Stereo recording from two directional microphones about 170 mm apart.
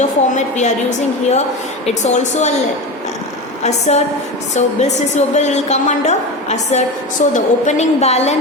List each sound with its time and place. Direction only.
0.0 s a woman's voice: 45° left (ahead or behind)
3.6 s a woman's voice: 40° left (ahead or behind)
5.1 s a woman's voice: 45° left (ahead or behind)